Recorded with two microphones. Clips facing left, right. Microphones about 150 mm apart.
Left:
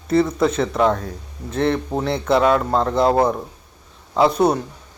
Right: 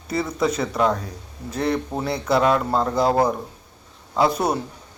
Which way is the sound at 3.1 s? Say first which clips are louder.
Left 2 dB; 25° left (ahead or behind).